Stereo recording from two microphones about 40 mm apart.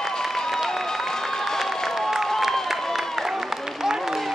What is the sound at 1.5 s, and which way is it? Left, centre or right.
Crowd, centre.